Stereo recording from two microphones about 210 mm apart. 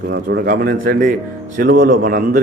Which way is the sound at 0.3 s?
45° right (ahead or behind).